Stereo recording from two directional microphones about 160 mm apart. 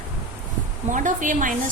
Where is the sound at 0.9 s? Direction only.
55° right (ahead or behind).